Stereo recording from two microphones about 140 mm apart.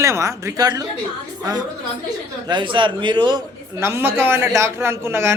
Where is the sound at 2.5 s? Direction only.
35° right (ahead or behind).